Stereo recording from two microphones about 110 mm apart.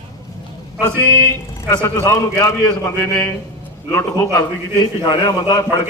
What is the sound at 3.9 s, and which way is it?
Speech, 25° left (ahead or behind).